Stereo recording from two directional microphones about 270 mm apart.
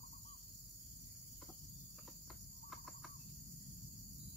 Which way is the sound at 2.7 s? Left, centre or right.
Centre.